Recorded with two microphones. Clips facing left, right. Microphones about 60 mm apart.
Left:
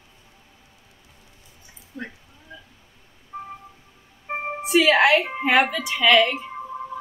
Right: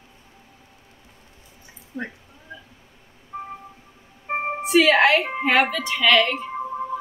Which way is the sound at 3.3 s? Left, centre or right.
Right.